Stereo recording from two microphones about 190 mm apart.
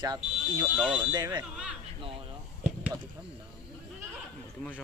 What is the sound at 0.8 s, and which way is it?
Speech, 5° right (ahead or behind).